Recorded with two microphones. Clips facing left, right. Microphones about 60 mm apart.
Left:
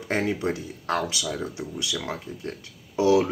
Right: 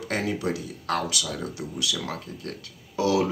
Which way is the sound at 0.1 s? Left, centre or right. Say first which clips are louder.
Left 2 dB; left.